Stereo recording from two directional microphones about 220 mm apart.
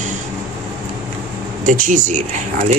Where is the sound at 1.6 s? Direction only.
35° right (ahead or behind).